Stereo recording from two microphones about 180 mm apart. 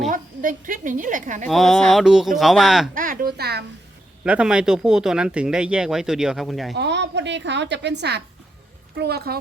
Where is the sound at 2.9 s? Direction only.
50° right (ahead or behind).